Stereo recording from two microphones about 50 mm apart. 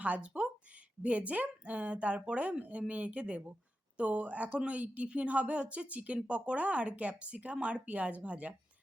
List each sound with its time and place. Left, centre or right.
0.0 s speech: right